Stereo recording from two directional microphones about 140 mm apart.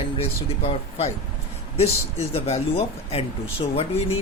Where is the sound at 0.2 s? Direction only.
45° left (ahead or behind).